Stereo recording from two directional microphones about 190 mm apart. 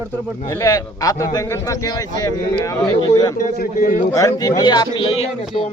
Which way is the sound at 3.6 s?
45° left (ahead or behind).